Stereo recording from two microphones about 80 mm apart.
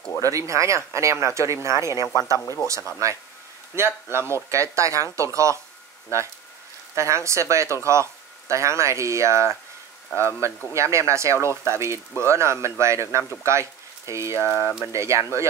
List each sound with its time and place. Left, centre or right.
0.2 s speech: right
2.4 s speech: left
3.0 s speech: right